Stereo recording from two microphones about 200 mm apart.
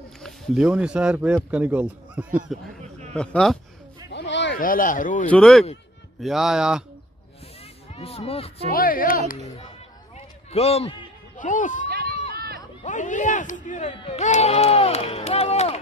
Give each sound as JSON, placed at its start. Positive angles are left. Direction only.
{"t": 0.2, "sound": "speech", "side_deg": -5}
{"t": 2.3, "sound": "a sound", "side_deg": -40}
{"t": 3.2, "sound": "speech", "side_deg": 5}
{"t": 4.1, "sound": "a sound", "side_deg": 60}
{"t": 4.6, "sound": "speech", "side_deg": 45}
{"t": 5.3, "sound": "speech", "side_deg": 5}
{"t": 7.9, "sound": "speech", "side_deg": 30}
{"t": 8.7, "sound": "speech", "side_deg": 45}
{"t": 10.1, "sound": "a sound", "side_deg": 30}
{"t": 11.9, "sound": "run", "side_deg": -50}
{"t": 12.8, "sound": "speech", "side_deg": 40}